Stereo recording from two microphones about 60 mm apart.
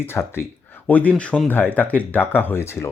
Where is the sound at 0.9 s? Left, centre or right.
Left.